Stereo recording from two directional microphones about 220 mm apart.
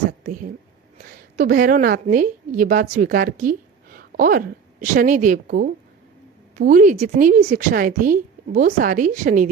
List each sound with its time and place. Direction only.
1.0 s a woman's voice: 40° right (ahead or behind)